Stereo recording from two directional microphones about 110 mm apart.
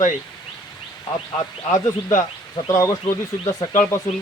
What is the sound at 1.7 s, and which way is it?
Speech, 30° left (ahead or behind).